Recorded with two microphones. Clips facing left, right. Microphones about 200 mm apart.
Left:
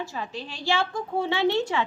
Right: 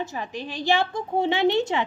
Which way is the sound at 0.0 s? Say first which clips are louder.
Right 2 dB; 15° right (ahead or behind).